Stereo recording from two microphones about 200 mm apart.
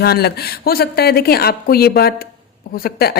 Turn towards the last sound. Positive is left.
turn(degrees=50)  # may be behind; listen again after turning